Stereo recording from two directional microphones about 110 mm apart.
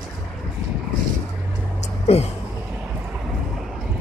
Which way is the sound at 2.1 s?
70° left (ahead or behind).